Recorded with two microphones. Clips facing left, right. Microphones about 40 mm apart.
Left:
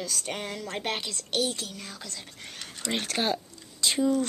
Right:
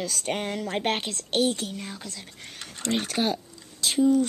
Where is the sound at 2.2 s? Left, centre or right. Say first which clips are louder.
Even; centre.